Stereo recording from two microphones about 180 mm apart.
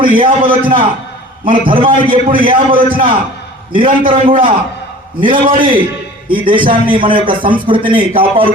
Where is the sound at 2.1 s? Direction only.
50° right (ahead or behind).